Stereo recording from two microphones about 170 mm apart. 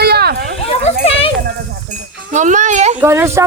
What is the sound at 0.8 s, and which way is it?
Children playing, 35° left (ahead or behind).